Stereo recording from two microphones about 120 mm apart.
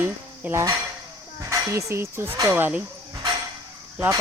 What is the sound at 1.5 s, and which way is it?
Speech, 20° right (ahead or behind).